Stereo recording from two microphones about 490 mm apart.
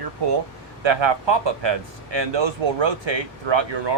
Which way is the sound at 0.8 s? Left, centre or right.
Right.